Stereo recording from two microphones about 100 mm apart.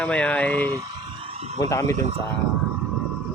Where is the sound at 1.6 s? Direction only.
30° left (ahead or behind).